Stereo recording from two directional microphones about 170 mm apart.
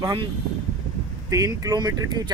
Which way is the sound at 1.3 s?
20° right (ahead or behind).